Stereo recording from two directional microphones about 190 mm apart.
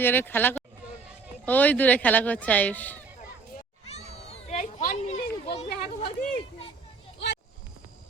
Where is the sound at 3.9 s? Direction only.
35° left (ahead or behind).